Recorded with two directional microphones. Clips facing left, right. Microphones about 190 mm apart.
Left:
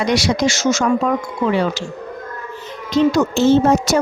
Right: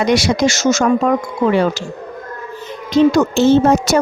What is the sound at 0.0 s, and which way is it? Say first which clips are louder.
Speech: right 3 dB; 50° right (ahead or behind).